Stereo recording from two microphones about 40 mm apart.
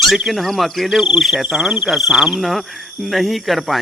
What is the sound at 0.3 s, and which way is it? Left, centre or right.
Speech, centre.